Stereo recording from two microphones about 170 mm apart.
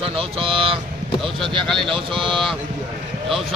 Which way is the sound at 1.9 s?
30° right (ahead or behind).